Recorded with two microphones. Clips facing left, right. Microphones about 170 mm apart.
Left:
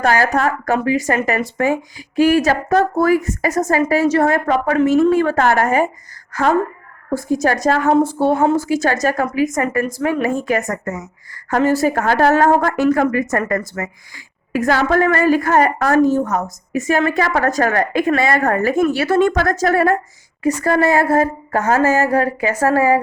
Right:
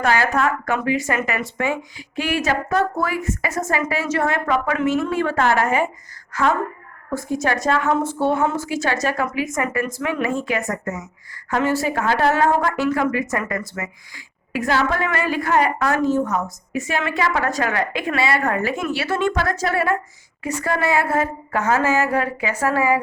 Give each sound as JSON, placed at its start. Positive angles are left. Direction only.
{"t": 0.0, "sound": "speech", "side_deg": 40}
{"t": 7.1, "sound": "a woman's voice", "side_deg": 35}